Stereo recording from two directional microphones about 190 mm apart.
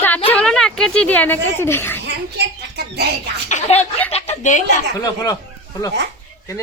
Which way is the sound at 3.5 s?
35° left (ahead or behind).